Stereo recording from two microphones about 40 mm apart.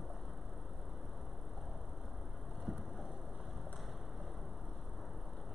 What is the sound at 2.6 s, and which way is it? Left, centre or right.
Vehicle, centre.